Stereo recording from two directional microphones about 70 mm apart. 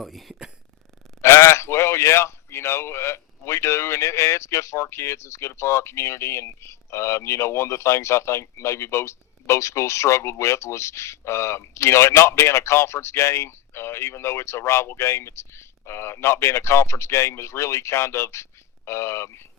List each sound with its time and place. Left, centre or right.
0.0 s speech: centre
1.2 s speech: left